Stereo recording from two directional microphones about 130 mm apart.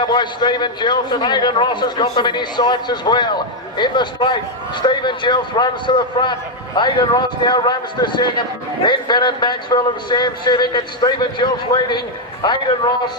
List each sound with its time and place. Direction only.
0.0 s a man's voice: 35° left (ahead or behind)